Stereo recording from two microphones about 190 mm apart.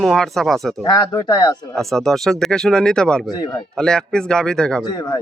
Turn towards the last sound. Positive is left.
turn(degrees=20)  # may be behind; listen again after turning